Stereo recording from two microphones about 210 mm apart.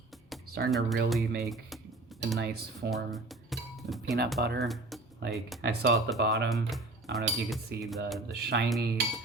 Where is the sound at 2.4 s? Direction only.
50° right (ahead or behind).